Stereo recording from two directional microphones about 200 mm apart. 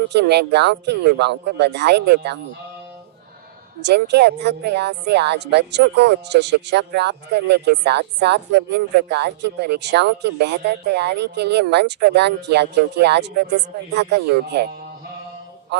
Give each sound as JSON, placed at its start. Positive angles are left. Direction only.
{"t": 0.1, "sound": "speech", "side_deg": -55}
{"t": 3.8, "sound": "speech", "side_deg": -55}